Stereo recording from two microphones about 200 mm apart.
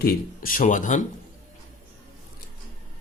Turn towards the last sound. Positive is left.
turn(degrees=40)  # may be behind; listen again after turning